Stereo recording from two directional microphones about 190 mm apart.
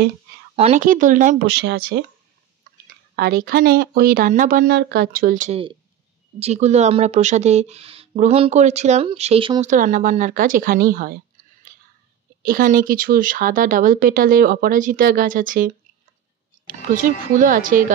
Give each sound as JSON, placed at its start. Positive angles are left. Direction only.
{"t": 0.6, "sound": "speech", "side_deg": -40}
{"t": 1.5, "sound": "speech", "side_deg": -60}
{"t": 3.2, "sound": "speech", "side_deg": -50}
{"t": 12.4, "sound": "speech", "side_deg": -50}